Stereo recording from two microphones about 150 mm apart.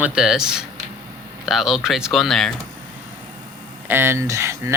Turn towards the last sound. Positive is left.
turn(degrees=-20)  # may be behind; listen again after turning